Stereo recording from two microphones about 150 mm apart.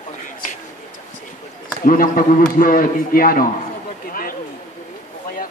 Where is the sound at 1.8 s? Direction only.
65° left (ahead or behind).